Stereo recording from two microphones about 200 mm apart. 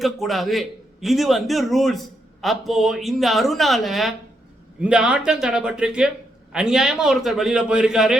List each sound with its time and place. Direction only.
0.0 s a man's voice: centre (ahead or behind)